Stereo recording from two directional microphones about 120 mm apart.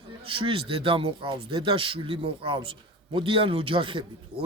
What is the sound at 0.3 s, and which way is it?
Speech, 45° right (ahead or behind).